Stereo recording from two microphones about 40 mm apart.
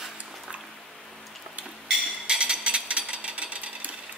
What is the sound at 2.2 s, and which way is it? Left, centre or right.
Jackhammer, right.